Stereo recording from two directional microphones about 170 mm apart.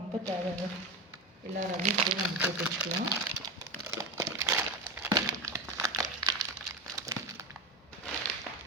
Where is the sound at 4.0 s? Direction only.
20° right (ahead or behind).